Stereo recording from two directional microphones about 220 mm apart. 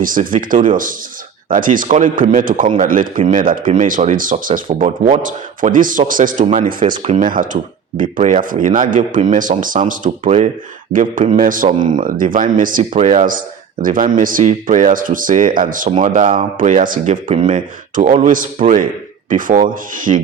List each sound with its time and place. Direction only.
0.0 s speech: 40° right (ahead or behind)
17.2 s speech: 25° right (ahead or behind)
17.5 s speech: 35° right (ahead or behind)